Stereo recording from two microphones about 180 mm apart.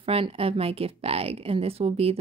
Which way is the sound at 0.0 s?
30° right (ahead or behind).